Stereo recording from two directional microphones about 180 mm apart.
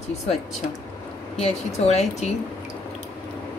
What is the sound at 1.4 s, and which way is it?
Speech, 35° left (ahead or behind).